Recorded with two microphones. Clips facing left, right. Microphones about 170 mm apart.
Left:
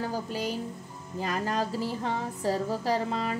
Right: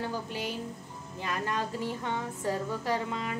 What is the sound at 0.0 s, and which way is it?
Speech, 40° left (ahead or behind).